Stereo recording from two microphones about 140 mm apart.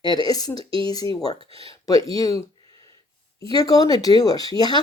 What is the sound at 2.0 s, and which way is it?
Speech, 25° left (ahead or behind).